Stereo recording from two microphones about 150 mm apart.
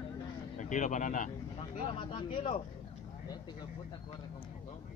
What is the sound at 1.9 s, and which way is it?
Speech, 35° left (ahead or behind).